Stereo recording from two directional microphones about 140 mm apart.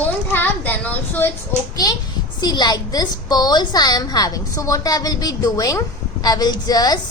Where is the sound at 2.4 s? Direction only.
30° left (ahead or behind).